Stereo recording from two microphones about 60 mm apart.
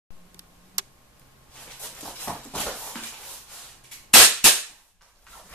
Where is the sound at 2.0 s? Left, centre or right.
Centre.